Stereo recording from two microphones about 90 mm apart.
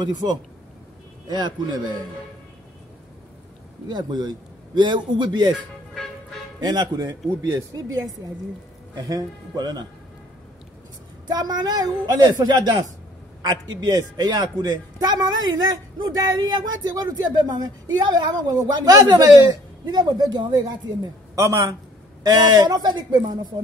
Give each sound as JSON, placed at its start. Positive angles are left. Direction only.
{"t": 0.0, "sound": "speech", "side_deg": -50}
{"t": 3.9, "sound": "a man's voice", "side_deg": -50}
{"t": 6.6, "sound": "speech", "side_deg": -50}
{"t": 11.2, "sound": "speech", "side_deg": -50}
{"t": 14.2, "sound": "a man's voice", "side_deg": -55}
{"t": 19.9, "sound": "speech", "side_deg": -50}
{"t": 21.4, "sound": "a man's voice", "side_deg": -35}
{"t": 22.2, "sound": "speech", "side_deg": -50}